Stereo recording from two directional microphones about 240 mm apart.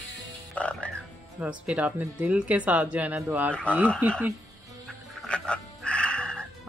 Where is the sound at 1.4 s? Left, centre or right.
Centre.